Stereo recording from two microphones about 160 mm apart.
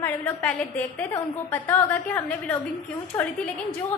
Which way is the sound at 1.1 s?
15° left (ahead or behind).